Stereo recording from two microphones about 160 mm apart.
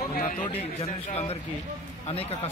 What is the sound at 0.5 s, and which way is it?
Speech, 40° left (ahead or behind).